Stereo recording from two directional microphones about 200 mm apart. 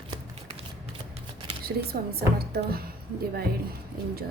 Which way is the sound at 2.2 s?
50° right (ahead or behind).